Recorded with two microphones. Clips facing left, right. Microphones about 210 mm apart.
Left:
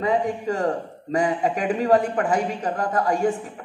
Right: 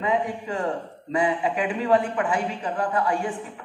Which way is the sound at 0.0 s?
40° left (ahead or behind).